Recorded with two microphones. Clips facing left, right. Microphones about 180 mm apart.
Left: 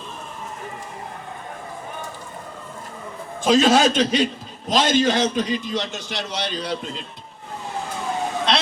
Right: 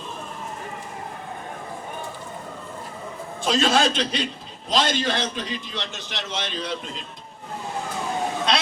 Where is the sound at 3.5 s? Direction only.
45° left (ahead or behind).